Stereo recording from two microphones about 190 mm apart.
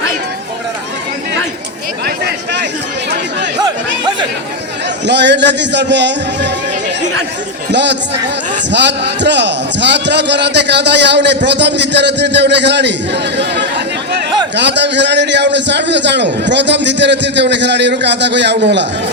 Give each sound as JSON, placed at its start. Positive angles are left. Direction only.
{"t": 2.0, "sound": "a sound", "side_deg": -60}
{"t": 5.0, "sound": "a man's voice", "side_deg": -65}
{"t": 7.7, "sound": "a man's voice", "side_deg": -65}
{"t": 13.3, "sound": "chatter", "side_deg": -65}
{"t": 14.5, "sound": "a man's voice", "side_deg": -65}